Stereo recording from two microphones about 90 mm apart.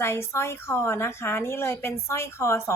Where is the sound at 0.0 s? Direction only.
30° left (ahead or behind).